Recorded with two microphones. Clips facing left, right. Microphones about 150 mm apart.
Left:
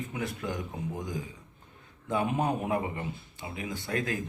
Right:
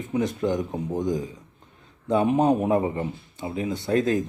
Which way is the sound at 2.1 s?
20° right (ahead or behind).